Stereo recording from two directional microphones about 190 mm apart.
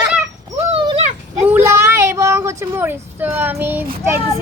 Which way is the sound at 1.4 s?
10° right (ahead or behind).